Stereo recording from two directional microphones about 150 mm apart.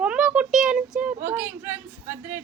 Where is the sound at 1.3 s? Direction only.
15° right (ahead or behind).